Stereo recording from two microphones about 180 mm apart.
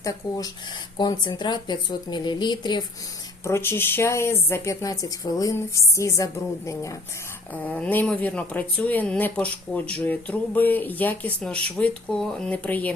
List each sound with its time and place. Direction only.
0.0 s a woman's voice: 20° left (ahead or behind)